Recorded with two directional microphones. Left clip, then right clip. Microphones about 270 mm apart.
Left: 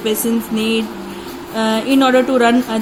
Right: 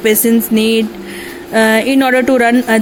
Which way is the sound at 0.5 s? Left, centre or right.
Right.